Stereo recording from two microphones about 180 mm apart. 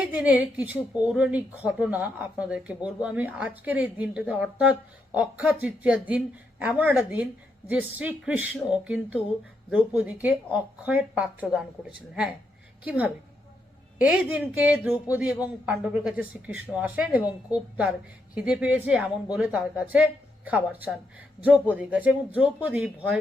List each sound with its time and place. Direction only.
0.1 s a woman's voice: 5° right (ahead or behind)
14.3 s a woman's voice: 5° right (ahead or behind)